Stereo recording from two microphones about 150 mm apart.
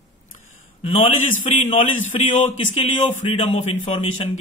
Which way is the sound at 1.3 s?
45° left (ahead or behind).